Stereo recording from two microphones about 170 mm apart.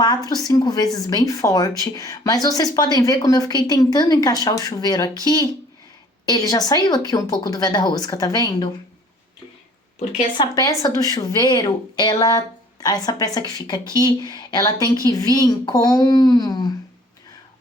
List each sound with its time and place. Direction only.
0.3 s speech: 20° left (ahead or behind)
10.3 s speech: 25° left (ahead or behind)